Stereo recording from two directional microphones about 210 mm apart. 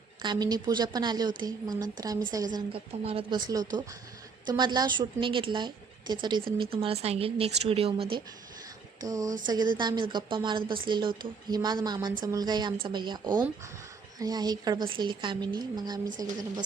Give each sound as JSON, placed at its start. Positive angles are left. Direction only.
{"t": 0.2, "sound": "a woman's voice", "side_deg": -20}
{"t": 9.0, "sound": "a woman's voice", "side_deg": -15}
{"t": 16.0, "sound": "a woman's voice", "side_deg": -40}